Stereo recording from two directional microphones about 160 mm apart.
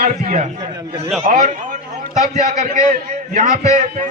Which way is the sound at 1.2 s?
50° right (ahead or behind).